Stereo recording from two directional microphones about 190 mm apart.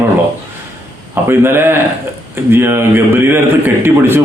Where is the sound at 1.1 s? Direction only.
10° right (ahead or behind).